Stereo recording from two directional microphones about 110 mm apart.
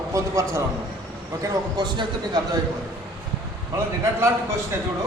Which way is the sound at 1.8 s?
45° right (ahead or behind).